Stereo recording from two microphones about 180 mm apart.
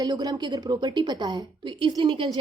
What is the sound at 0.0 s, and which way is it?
A woman's voice, 20° right (ahead or behind).